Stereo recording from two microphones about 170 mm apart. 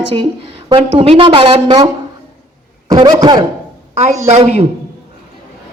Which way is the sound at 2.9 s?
25° right (ahead or behind).